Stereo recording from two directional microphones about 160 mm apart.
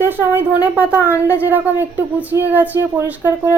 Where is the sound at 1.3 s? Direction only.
10° right (ahead or behind).